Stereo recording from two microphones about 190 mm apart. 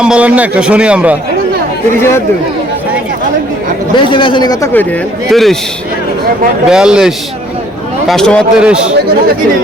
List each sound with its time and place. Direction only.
0.0 s a man's voice: 5° right (ahead or behind)
3.9 s a man's voice: 25° left (ahead or behind)
5.3 s a man's voice: centre (ahead or behind)
6.7 s a man's voice: 5° right (ahead or behind)